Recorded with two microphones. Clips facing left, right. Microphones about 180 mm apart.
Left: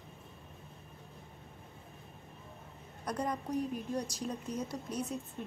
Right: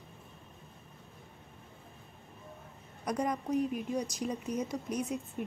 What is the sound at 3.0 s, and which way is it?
A woman's voice, 10° right (ahead or behind).